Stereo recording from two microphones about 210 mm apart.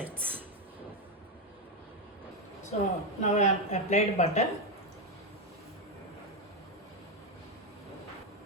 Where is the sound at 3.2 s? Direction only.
35° left (ahead or behind).